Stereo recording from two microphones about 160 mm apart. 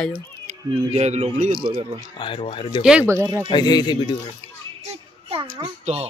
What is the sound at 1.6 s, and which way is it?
Speech, 30° right (ahead or behind).